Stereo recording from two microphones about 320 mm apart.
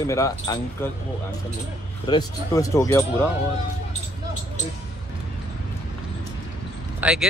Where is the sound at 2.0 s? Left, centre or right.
Centre.